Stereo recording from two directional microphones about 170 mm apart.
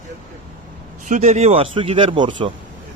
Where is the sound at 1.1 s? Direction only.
45° right (ahead or behind); by 2.5 s 30° right (ahead or behind).